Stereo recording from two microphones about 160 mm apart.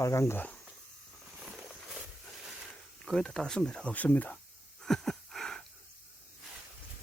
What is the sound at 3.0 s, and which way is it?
Speech, 5° left (ahead or behind).